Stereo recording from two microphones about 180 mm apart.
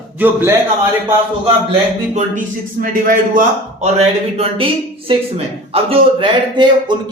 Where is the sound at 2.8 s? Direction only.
45° right (ahead or behind).